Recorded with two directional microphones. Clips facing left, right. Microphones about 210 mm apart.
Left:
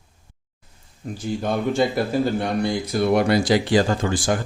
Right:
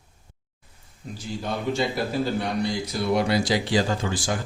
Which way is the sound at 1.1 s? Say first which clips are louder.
Left 6 dB; 55° left (ahead or behind).